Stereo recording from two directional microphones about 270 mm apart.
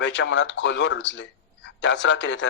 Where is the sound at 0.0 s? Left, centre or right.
Left.